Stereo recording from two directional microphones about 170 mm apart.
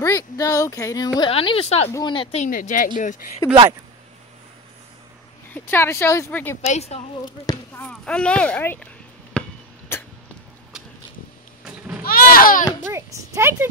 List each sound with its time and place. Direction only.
0.0 s speech: 20° left (ahead or behind)
1.3 s a woman's voice: 35° left (ahead or behind)
1.9 s speech: 20° left (ahead or behind)
2.1 s speech: 45° left (ahead or behind)
5.5 s speech: 15° left (ahead or behind)
6.6 s a woman's voice: 40° left (ahead or behind)
7.7 s speech: 5° left (ahead or behind)
9.3 s a sound: 5° left (ahead or behind)
9.9 s cough: 15° left (ahead or behind)
12.0 s a sound: 60° left (ahead or behind)
12.8 s speech: 15° right (ahead or behind)